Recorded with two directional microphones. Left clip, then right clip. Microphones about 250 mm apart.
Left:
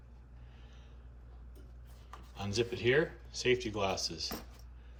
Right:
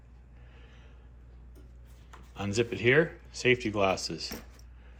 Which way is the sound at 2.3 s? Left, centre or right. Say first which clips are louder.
Right 5 dB; centre.